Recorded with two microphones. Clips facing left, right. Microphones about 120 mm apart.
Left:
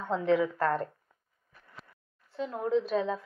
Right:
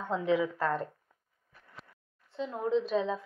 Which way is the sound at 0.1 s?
5° right (ahead or behind).